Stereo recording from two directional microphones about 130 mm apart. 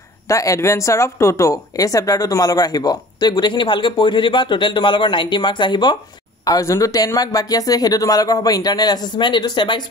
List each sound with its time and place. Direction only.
0.3 s speech: 25° left (ahead or behind)
6.4 s speech: 25° left (ahead or behind)